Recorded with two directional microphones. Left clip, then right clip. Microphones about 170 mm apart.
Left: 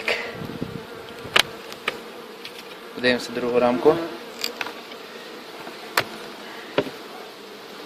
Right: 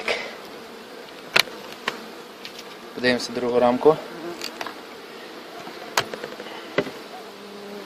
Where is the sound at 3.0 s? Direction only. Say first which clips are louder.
Even; 15° right (ahead or behind).